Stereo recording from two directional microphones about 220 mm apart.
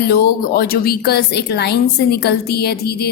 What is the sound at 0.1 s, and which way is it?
A woman's voice, 45° left (ahead or behind).